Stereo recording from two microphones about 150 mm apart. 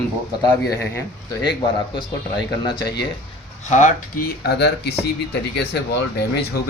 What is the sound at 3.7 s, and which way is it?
Speech, 55° left (ahead or behind).